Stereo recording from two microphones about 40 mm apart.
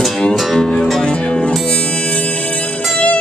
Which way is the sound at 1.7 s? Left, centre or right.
Left.